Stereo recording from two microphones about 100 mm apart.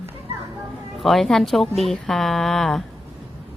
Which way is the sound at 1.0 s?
Centre (ahead or behind).